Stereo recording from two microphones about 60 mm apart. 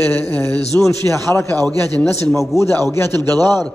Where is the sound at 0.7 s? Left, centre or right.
Left.